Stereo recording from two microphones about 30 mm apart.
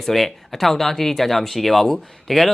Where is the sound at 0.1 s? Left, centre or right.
Centre.